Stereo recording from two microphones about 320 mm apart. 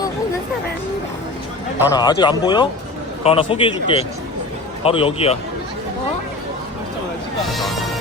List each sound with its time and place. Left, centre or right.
1.9 s speech: centre
7.5 s music: centre